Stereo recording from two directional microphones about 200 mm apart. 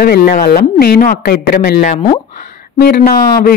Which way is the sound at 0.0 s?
50° left (ahead or behind).